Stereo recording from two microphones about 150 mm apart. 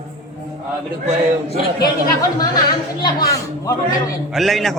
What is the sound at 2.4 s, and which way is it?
Speech, 30° left (ahead or behind).